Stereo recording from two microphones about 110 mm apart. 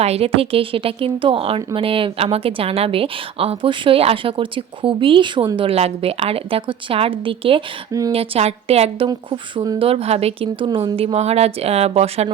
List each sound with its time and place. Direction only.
0.0 s speech: 65° right (ahead or behind)
9.0 s speech: 50° right (ahead or behind)
9.7 s speech: 60° right (ahead or behind)